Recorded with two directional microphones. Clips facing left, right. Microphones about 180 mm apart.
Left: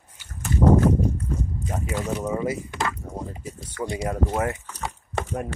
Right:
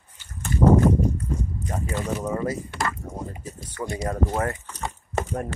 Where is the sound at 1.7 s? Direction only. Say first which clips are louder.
Even; 5° left (ahead or behind).